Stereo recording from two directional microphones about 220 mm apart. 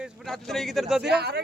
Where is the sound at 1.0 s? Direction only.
50° right (ahead or behind).